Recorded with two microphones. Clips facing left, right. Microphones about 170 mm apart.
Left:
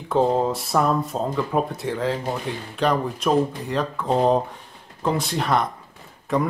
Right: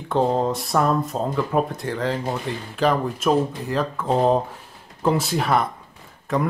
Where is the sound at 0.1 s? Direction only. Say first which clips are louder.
Left 1 dB; centre (ahead or behind).